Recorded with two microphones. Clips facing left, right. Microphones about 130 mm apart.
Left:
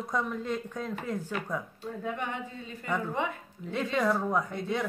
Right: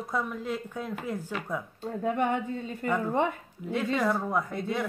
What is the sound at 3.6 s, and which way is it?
Speech, centre (ahead or behind).